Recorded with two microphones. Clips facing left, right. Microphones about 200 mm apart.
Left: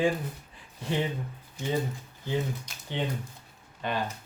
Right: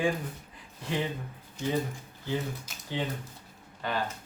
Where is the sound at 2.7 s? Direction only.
5° right (ahead or behind).